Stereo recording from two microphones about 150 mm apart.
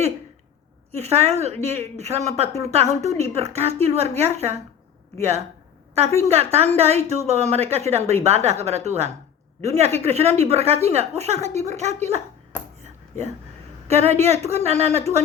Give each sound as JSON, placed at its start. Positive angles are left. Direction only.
{"t": 0.9, "sound": "a woman's voice", "side_deg": -45}
{"t": 6.1, "sound": "a woman's voice", "side_deg": -45}
{"t": 12.8, "sound": "a sound", "side_deg": -50}
{"t": 13.8, "sound": "a woman's voice", "side_deg": -45}